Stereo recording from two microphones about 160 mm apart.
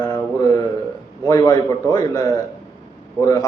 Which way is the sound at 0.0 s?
25° left (ahead or behind).